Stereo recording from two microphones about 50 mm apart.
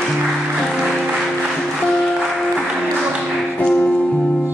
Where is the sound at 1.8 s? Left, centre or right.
Centre.